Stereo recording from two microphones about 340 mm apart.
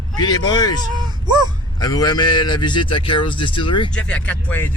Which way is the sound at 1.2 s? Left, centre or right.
Centre.